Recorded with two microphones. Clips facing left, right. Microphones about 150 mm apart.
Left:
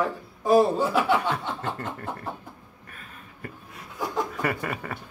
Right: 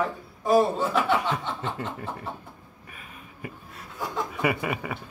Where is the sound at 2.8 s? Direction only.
10° right (ahead or behind).